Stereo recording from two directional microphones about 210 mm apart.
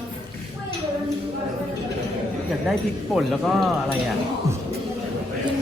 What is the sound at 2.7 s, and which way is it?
Speech, centre (ahead or behind).